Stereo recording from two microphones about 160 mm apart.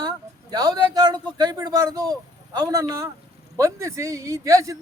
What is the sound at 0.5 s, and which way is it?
Speech, 25° right (ahead or behind).